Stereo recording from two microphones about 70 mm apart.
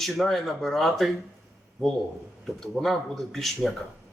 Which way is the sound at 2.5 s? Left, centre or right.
Centre.